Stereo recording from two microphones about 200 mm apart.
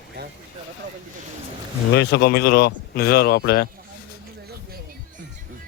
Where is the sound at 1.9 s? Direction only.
60° left (ahead or behind).